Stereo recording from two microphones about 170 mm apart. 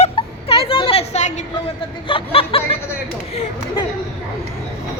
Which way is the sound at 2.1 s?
35° left (ahead or behind).